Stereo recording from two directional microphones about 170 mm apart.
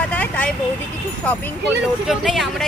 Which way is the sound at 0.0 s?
10° left (ahead or behind).